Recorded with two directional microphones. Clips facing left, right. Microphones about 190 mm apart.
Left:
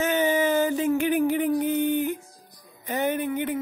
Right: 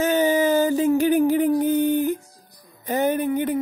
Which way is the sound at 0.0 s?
35° right (ahead or behind).